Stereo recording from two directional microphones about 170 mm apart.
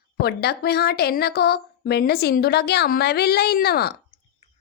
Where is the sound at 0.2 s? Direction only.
70° left (ahead or behind).